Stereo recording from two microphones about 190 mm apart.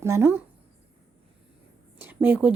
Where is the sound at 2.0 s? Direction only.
10° right (ahead or behind).